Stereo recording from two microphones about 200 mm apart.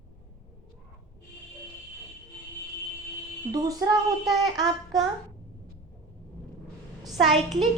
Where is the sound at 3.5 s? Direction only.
20° right (ahead or behind).